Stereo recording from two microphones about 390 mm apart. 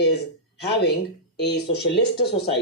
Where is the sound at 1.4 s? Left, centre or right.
Left.